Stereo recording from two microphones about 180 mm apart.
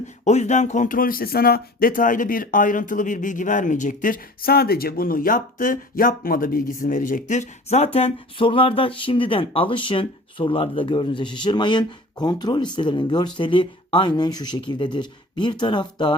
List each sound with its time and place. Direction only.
0.3 s speech: 40° left (ahead or behind)